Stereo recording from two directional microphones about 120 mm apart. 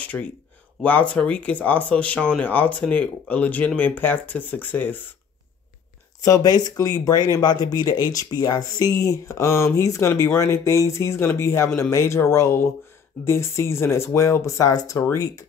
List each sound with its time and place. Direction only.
0.0 s a sound: 10° left (ahead or behind)
0.8 s speech: 10° left (ahead or behind)
6.2 s speech: 30° left (ahead or behind)